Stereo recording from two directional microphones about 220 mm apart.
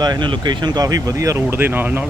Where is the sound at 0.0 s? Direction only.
20° right (ahead or behind).